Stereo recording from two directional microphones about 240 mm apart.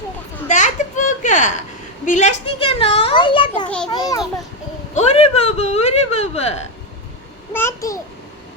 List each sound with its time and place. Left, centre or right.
0.4 s a sound: left
2.0 s a child's voice: left
4.9 s a child's voice: left
7.5 s a child's voice: centre